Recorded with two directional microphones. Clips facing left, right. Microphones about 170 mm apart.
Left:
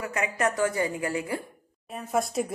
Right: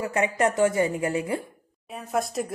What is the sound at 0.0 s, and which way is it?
A woman's voice, 25° right (ahead or behind).